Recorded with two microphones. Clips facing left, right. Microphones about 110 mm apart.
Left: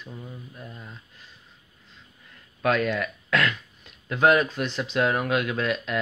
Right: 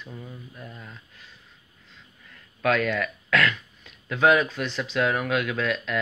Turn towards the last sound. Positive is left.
turn(degrees=25)  # may be behind; listen again after turning